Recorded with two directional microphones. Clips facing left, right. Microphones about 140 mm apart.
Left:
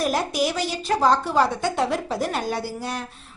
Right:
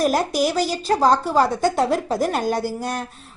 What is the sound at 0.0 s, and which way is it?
A woman's voice, 40° right (ahead or behind).